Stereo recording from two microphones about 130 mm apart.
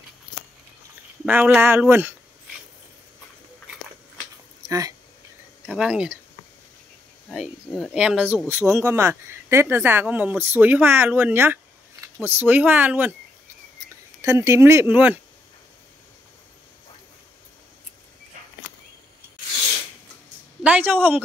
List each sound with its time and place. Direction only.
1.2 s speech: 15° right (ahead or behind)
4.6 s speech: 30° right (ahead or behind)
5.7 s speech: 5° right (ahead or behind)
7.2 s speech: 5° left (ahead or behind)
8.7 s speech: 20° right (ahead or behind)
14.2 s speech: 25° right (ahead or behind)
20.6 s a sound: 15° right (ahead or behind)